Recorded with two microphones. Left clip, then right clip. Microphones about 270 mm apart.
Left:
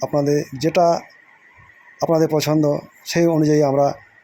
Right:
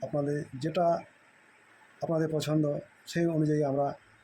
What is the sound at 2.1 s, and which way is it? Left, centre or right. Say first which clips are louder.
Speech: left 13 dB; left.